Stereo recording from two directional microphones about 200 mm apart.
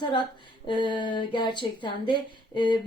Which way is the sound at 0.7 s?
25° left (ahead or behind).